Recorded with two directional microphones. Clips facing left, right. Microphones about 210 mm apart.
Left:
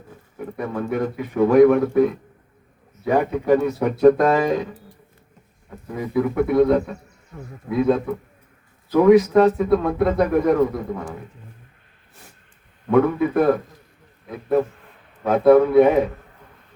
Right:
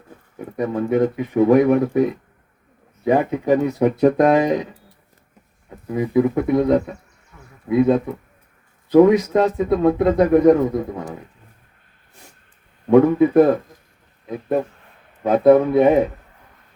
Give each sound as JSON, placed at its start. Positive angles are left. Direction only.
{"t": 0.5, "sound": "speech", "side_deg": -20}
{"t": 5.9, "sound": "speech", "side_deg": -20}
{"t": 7.3, "sound": "speech", "side_deg": 45}
{"t": 7.7, "sound": "speech", "side_deg": -20}
{"t": 12.9, "sound": "a man's voice", "side_deg": -20}
{"t": 15.2, "sound": "speech", "side_deg": -20}